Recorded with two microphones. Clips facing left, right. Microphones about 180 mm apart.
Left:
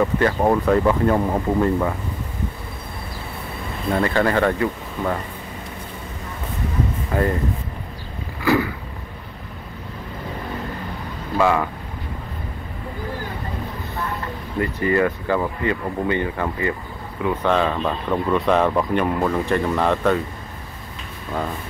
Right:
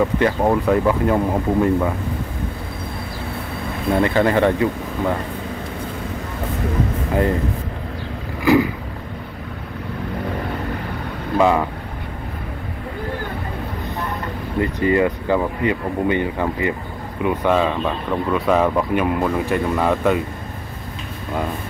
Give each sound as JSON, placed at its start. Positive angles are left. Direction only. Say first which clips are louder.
{"t": 0.4, "sound": "speech", "louder": "left 1 dB", "side_deg": -5}
{"t": 3.9, "sound": "speech", "louder": "right 2 dB", "side_deg": -20}
{"t": 8.4, "sound": "vehicle", "louder": "right 4 dB", "side_deg": -15}
{"t": 11.3, "sound": "speech", "louder": "right 2 dB", "side_deg": -20}
{"t": 14.6, "sound": "speech", "louder": "right 2 dB", "side_deg": -20}